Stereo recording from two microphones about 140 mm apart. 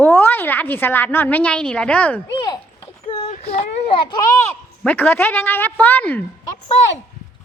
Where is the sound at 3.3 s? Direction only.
50° left (ahead or behind).